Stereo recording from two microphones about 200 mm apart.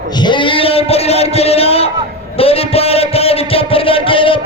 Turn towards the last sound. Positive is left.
turn(degrees=25)  # may be behind; listen again after turning